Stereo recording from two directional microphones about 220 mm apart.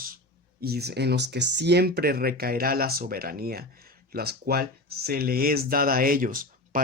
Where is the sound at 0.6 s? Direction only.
45° right (ahead or behind).